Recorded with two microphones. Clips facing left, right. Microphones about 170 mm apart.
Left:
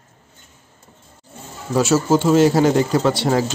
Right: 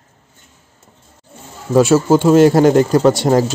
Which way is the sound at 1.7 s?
55° right (ahead or behind).